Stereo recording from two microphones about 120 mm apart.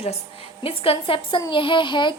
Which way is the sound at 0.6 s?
50° left (ahead or behind).